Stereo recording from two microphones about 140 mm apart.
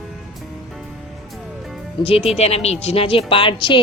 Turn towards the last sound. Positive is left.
turn(degrees=40)  # may be behind; listen again after turning